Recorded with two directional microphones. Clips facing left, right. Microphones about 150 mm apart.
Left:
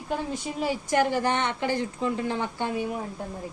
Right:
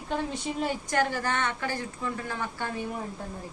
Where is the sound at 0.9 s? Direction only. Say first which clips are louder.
Left 5 dB; 15° left (ahead or behind).